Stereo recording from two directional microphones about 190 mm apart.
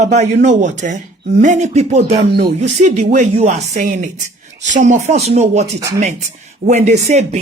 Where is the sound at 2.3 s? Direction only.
55° right (ahead or behind).